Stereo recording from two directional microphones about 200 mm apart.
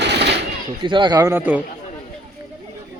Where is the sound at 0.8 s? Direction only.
25° right (ahead or behind).